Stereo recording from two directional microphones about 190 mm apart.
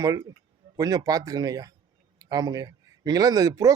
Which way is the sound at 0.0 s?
15° right (ahead or behind).